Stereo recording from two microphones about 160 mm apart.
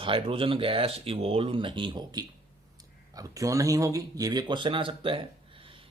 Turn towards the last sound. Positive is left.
turn(degrees=-35)  # may be behind; listen again after turning